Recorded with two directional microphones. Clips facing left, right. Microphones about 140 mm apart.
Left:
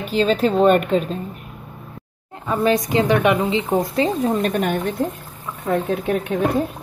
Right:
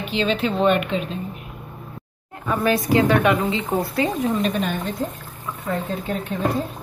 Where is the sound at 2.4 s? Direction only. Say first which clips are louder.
Left 2 dB; 20° left (ahead or behind).